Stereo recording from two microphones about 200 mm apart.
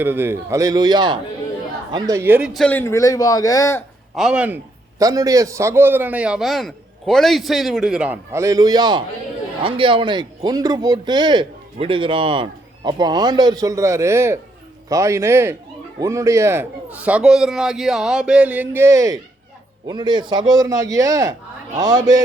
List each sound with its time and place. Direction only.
0.0 s a man's voice: 10° right (ahead or behind); by 3.8 s 15° left (ahead or behind)
4.1 s a man's voice: centre (ahead or behind); by 22.0 s 20° right (ahead or behind)